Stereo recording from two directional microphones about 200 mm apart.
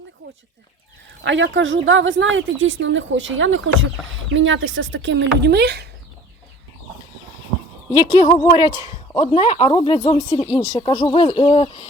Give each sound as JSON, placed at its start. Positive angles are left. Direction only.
{"t": 1.2, "sound": "speech", "side_deg": -70}
{"t": 8.1, "sound": "speech", "side_deg": 20}
{"t": 10.5, "sound": "speech", "side_deg": -5}
{"t": 10.8, "sound": "speech", "side_deg": 25}